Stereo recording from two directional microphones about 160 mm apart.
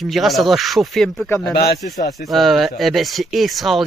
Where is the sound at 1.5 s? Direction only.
85° left.